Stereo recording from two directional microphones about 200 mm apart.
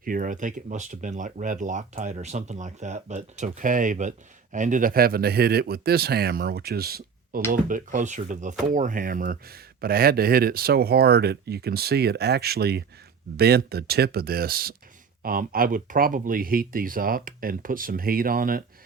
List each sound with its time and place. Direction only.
0.0 s speech: 45° right (ahead or behind)